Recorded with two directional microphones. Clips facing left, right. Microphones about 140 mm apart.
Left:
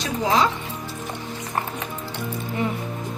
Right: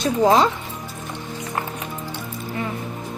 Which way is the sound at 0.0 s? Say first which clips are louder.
Right 5 dB; 50° right (ahead or behind).